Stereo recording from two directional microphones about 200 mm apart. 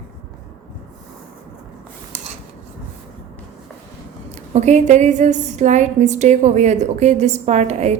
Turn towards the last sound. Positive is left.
turn(degrees=-35)  # may be behind; listen again after turning